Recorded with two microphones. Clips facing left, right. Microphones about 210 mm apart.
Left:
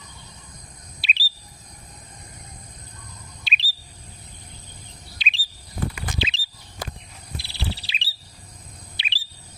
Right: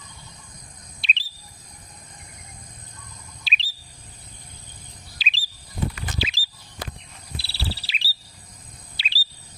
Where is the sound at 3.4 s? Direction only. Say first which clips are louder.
Left 1 dB; centre (ahead or behind).